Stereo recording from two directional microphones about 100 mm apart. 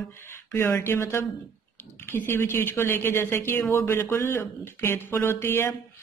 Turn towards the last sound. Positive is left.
turn(degrees=25)  # may be behind; listen again after turning